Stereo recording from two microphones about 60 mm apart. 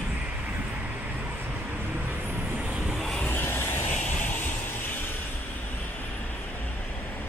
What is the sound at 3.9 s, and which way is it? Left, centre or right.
Vehicle, left.